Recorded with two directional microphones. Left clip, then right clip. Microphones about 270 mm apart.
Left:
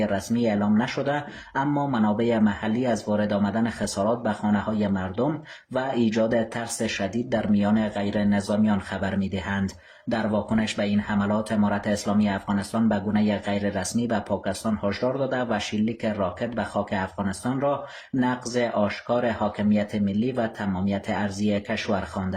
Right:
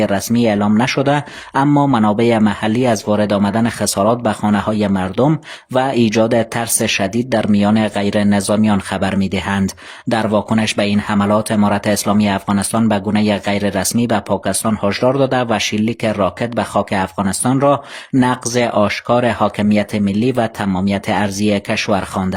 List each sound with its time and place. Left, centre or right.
0.0 s speech: right